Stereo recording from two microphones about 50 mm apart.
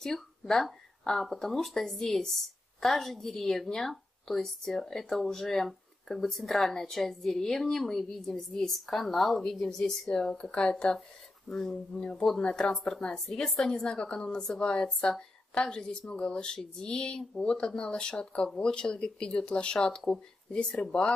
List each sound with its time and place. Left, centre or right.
0.0 s a woman's voice: centre
13.3 s a woman's voice: centre